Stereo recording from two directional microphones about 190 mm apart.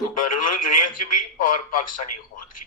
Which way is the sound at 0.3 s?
45° left (ahead or behind).